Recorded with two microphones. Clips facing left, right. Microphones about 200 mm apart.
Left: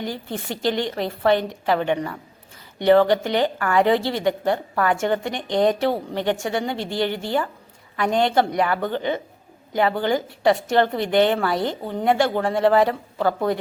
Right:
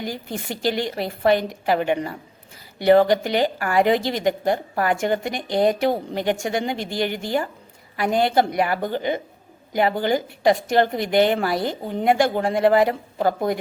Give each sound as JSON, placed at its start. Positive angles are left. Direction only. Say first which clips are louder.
{"t": 0.0, "sound": "a woman's voice", "louder": "even", "side_deg": -10}